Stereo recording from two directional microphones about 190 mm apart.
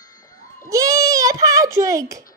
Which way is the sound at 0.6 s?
15° right (ahead or behind).